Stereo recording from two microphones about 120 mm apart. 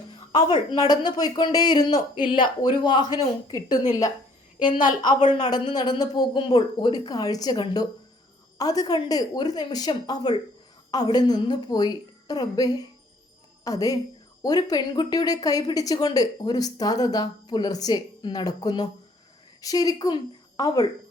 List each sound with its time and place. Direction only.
0.3 s a woman's voice: 40° left (ahead or behind)